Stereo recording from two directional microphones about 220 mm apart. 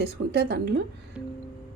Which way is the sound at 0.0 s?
45° right (ahead or behind).